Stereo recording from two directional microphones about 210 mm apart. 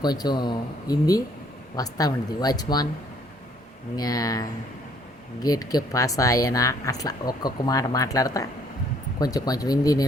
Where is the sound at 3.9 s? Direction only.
15° left (ahead or behind).